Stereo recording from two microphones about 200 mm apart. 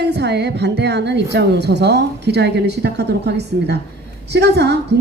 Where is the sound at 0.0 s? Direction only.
55° right (ahead or behind).